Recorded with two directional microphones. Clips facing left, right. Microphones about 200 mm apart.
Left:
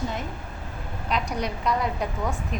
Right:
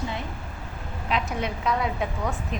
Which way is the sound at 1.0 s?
Centre (ahead or behind).